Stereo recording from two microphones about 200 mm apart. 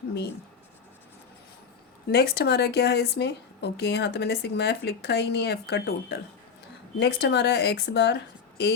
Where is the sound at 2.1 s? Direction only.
55° left (ahead or behind).